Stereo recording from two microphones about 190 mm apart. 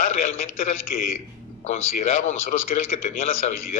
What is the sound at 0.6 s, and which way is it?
Speech, 50° left (ahead or behind).